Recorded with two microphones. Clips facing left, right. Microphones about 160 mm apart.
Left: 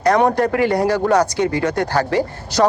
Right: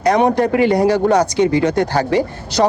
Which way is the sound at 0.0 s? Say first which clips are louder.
Right 1 dB; 20° right (ahead or behind).